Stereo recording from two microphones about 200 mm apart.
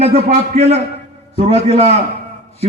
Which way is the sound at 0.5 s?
30° right (ahead or behind).